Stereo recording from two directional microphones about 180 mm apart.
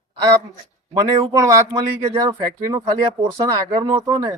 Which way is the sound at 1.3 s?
20° right (ahead or behind).